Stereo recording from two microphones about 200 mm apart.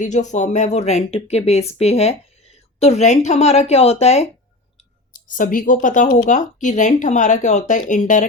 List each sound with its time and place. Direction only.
0.0 s speech: 35° left (ahead or behind)
5.4 s a woman's voice: 40° left (ahead or behind)